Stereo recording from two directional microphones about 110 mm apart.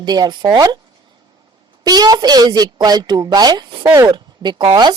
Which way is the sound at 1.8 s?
35° right (ahead or behind).